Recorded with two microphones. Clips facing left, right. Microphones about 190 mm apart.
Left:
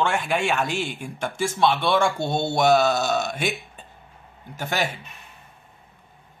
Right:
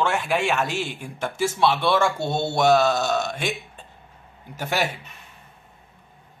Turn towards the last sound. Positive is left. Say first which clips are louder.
# right 1 dB
turn(degrees=-5)  # may be behind; listen again after turning